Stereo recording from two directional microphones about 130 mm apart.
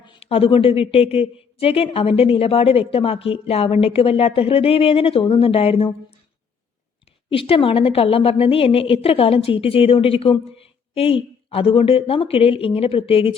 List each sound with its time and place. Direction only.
0.0 s a woman's voice: 45° left (ahead or behind)
7.3 s a woman's voice: 45° left (ahead or behind)